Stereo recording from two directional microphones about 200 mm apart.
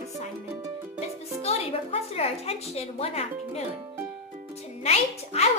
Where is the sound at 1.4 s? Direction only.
30° left (ahead or behind).